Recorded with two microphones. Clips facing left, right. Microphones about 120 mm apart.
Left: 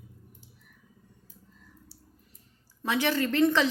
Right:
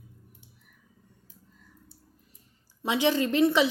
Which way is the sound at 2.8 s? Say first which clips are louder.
Right 2 dB; 15° right (ahead or behind).